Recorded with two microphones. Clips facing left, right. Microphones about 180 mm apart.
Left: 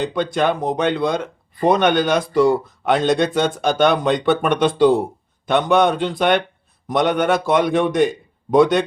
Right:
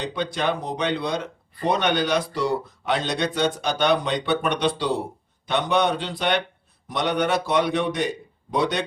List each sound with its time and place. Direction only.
0.0 s speech: 50° left (ahead or behind)